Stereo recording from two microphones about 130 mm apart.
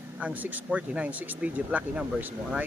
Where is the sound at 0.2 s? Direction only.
10° right (ahead or behind).